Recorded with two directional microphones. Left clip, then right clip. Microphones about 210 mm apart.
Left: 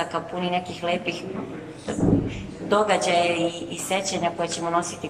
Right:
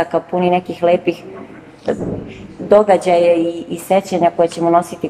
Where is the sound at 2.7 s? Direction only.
35° right (ahead or behind).